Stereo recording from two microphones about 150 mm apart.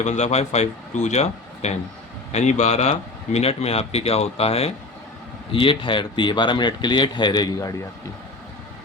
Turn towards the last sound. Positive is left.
turn(degrees=25)  # may be behind; listen again after turning